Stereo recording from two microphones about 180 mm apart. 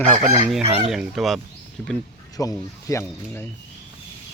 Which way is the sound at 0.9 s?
Centre (ahead or behind).